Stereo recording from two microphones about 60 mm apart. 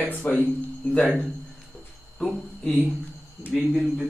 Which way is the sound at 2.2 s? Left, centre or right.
Centre.